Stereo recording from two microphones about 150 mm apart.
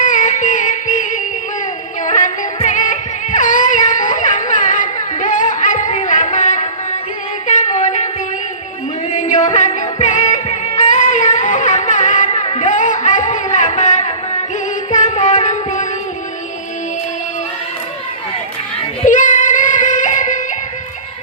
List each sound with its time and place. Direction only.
0.0 s music: 55° left (ahead or behind)
7.4 s a sound: 55° left (ahead or behind)
9.1 s music: 55° left (ahead or behind)
19.0 s music: 60° left (ahead or behind)